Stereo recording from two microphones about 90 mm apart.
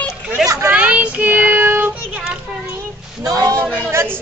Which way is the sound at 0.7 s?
15° right (ahead or behind).